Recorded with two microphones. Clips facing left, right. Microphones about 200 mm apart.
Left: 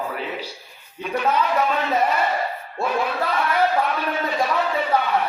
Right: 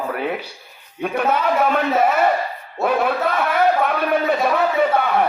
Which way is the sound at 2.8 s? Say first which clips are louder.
Right 5 dB; 60° right (ahead or behind).